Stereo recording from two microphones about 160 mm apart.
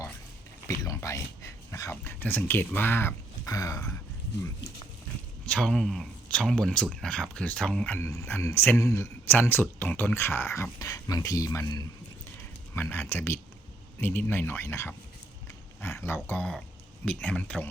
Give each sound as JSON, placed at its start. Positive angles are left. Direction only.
{"t": 0.7, "sound": "speech", "side_deg": 20}
{"t": 5.5, "sound": "speech", "side_deg": 5}
{"t": 12.4, "sound": "speech", "side_deg": 15}